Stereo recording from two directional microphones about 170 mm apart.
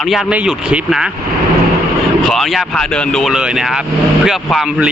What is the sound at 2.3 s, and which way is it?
Speech, centre (ahead or behind).